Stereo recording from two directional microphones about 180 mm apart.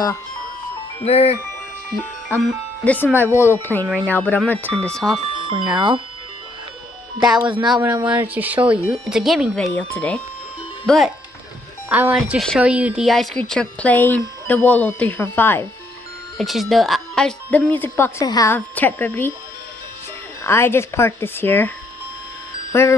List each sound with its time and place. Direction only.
1.0 s speech: 35° left (ahead or behind)
2.2 s a woman's voice: 5° left (ahead or behind)
5.3 s music: 25° right (ahead or behind)
5.8 s speech: 25° right (ahead or behind)
7.3 s speech: 25° right (ahead or behind)
7.6 s a woman's voice: centre (ahead or behind)
11.9 s a woman's voice: 10° right (ahead or behind); by 15.6 s 10° left (ahead or behind)
16.3 s a woman's voice: centre (ahead or behind)
20.4 s a woman's voice: 15° left (ahead or behind)
22.7 s music: 15° left (ahead or behind)